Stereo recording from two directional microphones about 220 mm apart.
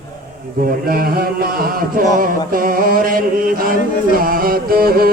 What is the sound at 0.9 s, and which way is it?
Music, 45° right (ahead or behind).